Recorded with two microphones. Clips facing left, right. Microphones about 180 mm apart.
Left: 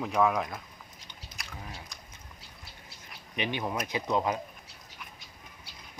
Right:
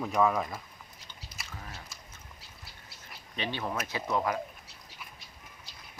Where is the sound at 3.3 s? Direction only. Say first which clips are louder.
Left 2 dB; 15° left (ahead or behind).